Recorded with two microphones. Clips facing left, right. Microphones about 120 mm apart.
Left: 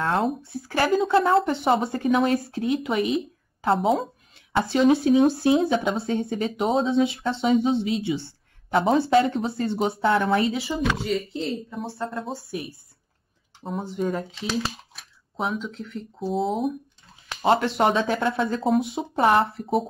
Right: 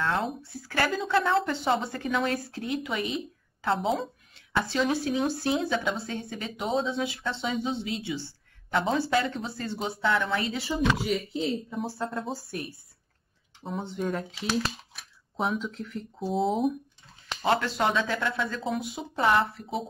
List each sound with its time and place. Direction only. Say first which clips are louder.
0.5 s speech: left 6 dB; 25° left (ahead or behind)
4.5 s speech: left 7 dB; 25° left (ahead or behind)
10.6 s speech: left 1 dB; centre (ahead or behind)
17.4 s speech: left 5 dB; 25° left (ahead or behind)